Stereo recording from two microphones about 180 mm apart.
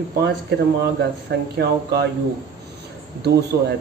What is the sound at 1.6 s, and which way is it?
Speech, 65° right (ahead or behind).